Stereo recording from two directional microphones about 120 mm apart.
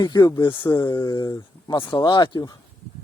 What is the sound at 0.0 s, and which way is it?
Speech, 35° left (ahead or behind).